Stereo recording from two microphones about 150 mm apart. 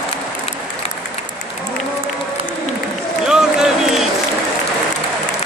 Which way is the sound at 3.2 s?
5° right (ahead or behind).